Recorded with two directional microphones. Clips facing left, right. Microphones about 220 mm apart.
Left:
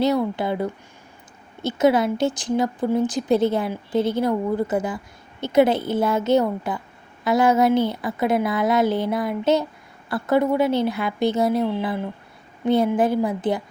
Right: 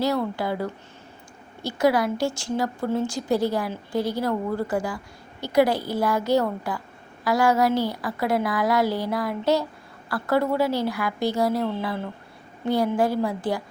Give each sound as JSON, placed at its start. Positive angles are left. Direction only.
{"t": 0.3, "sound": "speech", "side_deg": 20}